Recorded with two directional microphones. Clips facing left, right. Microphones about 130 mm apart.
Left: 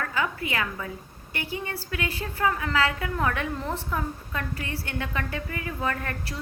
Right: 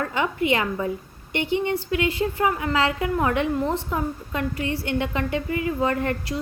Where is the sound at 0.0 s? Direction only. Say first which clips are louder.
Right 5 dB; 25° right (ahead or behind).